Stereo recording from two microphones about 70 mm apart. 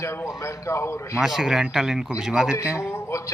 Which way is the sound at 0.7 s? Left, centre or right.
Left.